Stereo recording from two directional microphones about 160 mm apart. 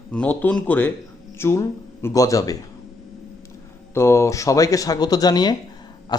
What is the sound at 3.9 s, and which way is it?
Speech, 15° left (ahead or behind).